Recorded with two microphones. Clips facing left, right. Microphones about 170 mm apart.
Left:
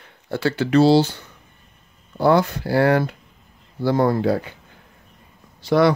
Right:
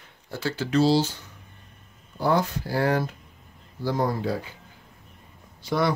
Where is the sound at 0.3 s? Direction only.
65° left (ahead or behind).